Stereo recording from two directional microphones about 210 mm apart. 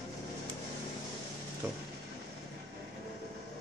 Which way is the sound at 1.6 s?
10° right (ahead or behind).